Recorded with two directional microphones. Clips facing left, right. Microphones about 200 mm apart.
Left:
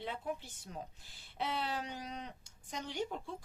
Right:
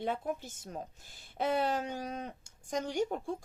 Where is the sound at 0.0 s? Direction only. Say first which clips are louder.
Right 6 dB; 45° right (ahead or behind).